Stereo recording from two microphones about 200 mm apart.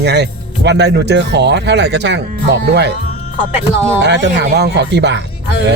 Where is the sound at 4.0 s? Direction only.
60° right (ahead or behind).